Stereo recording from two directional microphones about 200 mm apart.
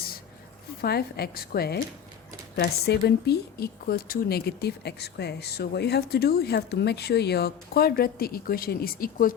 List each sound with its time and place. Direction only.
0.8 s speech: 55° left (ahead or behind)